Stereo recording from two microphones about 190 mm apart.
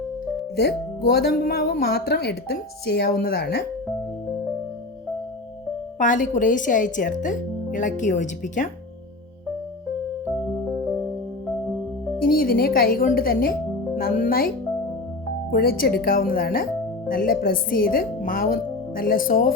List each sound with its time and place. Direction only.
0.5 s speech: 55° left (ahead or behind)
6.0 s speech: 40° left (ahead or behind)
12.3 s speech: 50° left (ahead or behind)
15.5 s speech: 50° left (ahead or behind)